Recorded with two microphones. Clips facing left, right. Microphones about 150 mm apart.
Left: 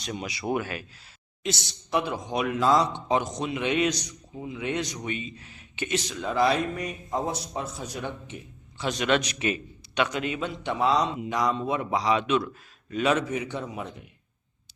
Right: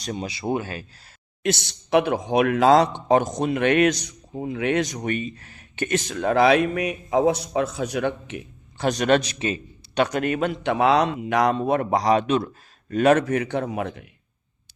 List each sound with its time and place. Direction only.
0.0 s speech: 35° right (ahead or behind)
1.4 s a man's voice: 55° right (ahead or behind)
3.1 s a man's voice: 50° right (ahead or behind); by 4.8 s 65° right (ahead or behind)
4.8 s speech: 50° right (ahead or behind); by 8.4 s 75° right (ahead or behind)
8.8 s a man's voice: 45° right (ahead or behind)
9.2 s a man's voice: 30° right (ahead or behind)
12.9 s a man's voice: 50° right (ahead or behind); by 14.1 s 75° right (ahead or behind)